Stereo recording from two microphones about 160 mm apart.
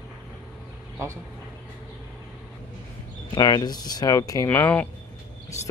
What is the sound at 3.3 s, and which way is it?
Speech, 25° left (ahead or behind).